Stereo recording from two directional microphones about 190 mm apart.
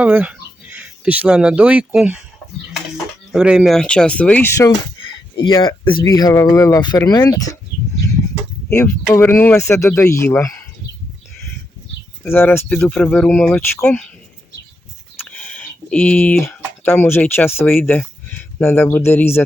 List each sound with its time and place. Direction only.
0.0 s speech: 10° right (ahead or behind)
3.3 s speech: 5° right (ahead or behind); by 4.7 s 15° left (ahead or behind)
5.5 s speech: 25° left (ahead or behind)
9.1 s speech: 10° left (ahead or behind)
12.2 s speech: 10° left (ahead or behind)
15.3 s speech: 5° left (ahead or behind)